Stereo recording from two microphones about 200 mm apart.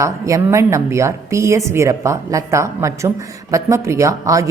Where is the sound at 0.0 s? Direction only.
15° right (ahead or behind).